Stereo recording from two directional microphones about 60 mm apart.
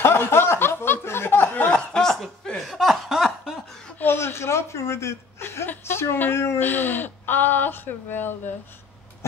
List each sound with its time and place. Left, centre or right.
0.0 s snicker: left
1.7 s chuckle: centre
2.6 s snicker: centre
4.0 s chuckle: left
5.7 s a sound: left